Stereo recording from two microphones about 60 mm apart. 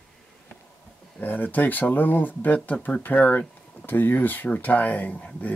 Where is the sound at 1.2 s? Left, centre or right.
Left.